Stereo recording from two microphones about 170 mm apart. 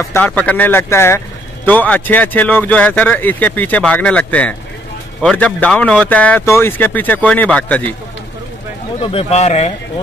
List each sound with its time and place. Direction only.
0.0 s speech: 10° left (ahead or behind)
9.0 s speech: 35° left (ahead or behind)